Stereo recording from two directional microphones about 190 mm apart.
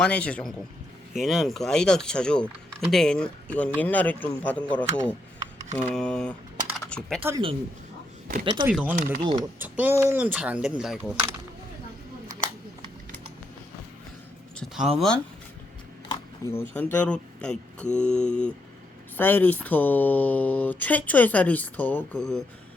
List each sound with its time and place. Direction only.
0.0 s speech: 5° left (ahead or behind)
6.7 s typing: 5° left (ahead or behind)
7.2 s speech: 15° right (ahead or behind)
8.6 s speech: 10° right (ahead or behind)
9.2 s speech: 20° right (ahead or behind)
9.6 s speech: 10° right (ahead or behind)
14.5 s speech: centre (ahead or behind)
16.0 s speech: 15° left (ahead or behind)